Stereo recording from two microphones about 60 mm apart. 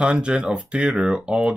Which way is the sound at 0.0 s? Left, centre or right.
Centre.